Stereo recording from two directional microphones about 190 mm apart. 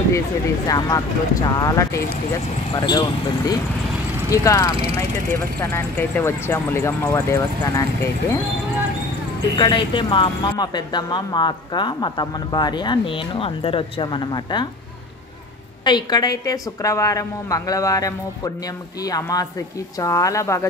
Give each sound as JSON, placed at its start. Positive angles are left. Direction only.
{"t": 0.7, "sound": "a woman's voice", "side_deg": 20}
{"t": 9.6, "sound": "speech", "side_deg": 25}
{"t": 15.8, "sound": "a woman's voice", "side_deg": 20}